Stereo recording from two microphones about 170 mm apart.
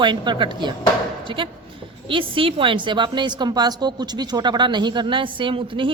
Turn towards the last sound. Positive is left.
turn(degrees=-30)  # may be behind; listen again after turning